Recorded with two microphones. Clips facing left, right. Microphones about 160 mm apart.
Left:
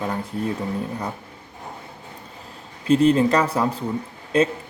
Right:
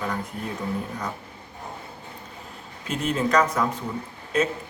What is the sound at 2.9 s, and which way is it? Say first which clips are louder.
Speech: left 7 dB; 35° left (ahead or behind).